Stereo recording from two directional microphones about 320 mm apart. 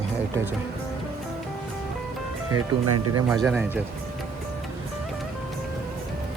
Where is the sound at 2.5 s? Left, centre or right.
Right.